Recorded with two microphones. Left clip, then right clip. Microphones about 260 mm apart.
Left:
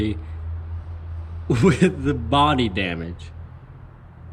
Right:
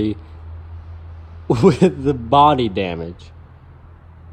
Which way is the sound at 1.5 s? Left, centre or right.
Centre.